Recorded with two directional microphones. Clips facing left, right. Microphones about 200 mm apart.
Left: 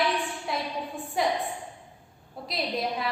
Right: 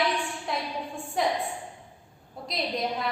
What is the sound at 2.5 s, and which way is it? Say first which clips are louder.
Speech: even; centre (ahead or behind).